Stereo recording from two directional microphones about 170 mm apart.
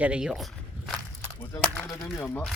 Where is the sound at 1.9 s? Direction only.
20° left (ahead or behind).